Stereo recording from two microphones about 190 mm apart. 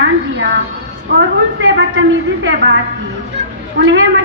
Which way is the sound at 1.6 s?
85° right.